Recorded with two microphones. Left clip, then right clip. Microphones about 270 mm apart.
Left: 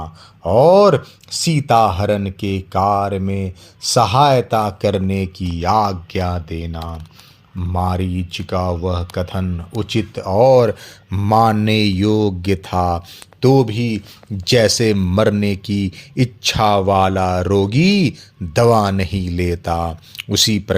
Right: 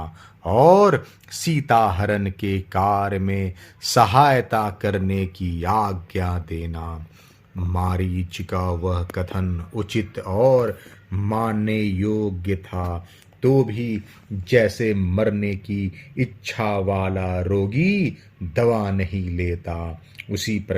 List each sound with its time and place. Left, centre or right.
0.0 s speech: centre
5.4 s speech: centre; by 20.7 s left